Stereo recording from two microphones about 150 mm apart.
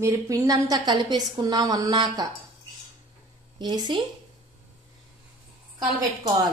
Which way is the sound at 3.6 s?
30° right (ahead or behind).